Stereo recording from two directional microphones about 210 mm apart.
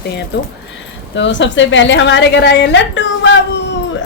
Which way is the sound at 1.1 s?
60° left (ahead or behind).